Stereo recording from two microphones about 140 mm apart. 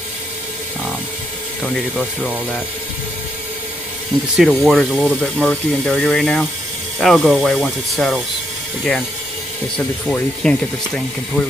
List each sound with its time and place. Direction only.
1.6 s speech: 5° right (ahead or behind)
4.4 s speech: centre (ahead or behind)
10.0 s speech: 10° left (ahead or behind)